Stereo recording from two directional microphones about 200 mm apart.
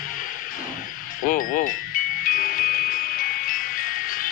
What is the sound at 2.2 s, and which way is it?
Music, 45° left (ahead or behind).